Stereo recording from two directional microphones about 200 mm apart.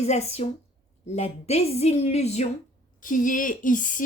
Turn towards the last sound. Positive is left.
turn(degrees=40)  # may be behind; listen again after turning